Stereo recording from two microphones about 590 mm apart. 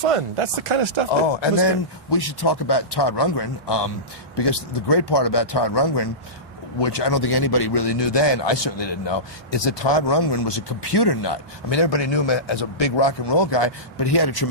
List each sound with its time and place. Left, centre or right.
0.0 s speech: right
1.3 s a man's voice: left